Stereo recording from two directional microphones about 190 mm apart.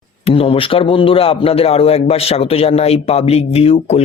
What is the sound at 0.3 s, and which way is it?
Speech, 30° left (ahead or behind).